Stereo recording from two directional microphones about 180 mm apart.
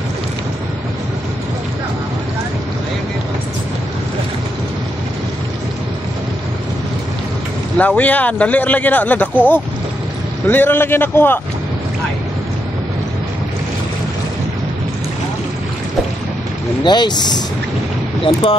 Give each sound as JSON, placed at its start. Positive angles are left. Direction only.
{"t": 7.7, "sound": "speech", "side_deg": 10}
{"t": 10.4, "sound": "speech", "side_deg": 10}
{"t": 16.8, "sound": "speech", "side_deg": 25}